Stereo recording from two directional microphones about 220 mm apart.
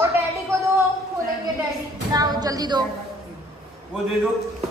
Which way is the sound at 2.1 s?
15° right (ahead or behind).